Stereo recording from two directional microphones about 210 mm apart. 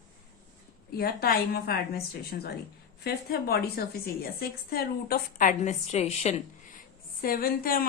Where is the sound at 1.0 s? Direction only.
45° left (ahead or behind).